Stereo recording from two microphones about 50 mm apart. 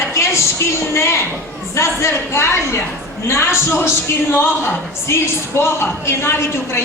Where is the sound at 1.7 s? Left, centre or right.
Left.